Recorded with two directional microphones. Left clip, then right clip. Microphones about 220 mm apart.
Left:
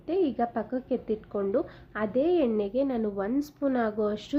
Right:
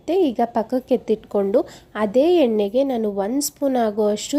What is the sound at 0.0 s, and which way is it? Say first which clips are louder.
A woman's voice: right 8 dB; 30° right (ahead or behind).